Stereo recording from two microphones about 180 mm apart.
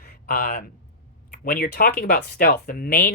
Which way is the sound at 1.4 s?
50° left (ahead or behind).